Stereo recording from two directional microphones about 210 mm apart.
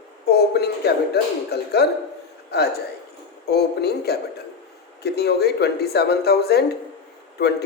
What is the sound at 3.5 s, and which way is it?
Speech, 50° left (ahead or behind).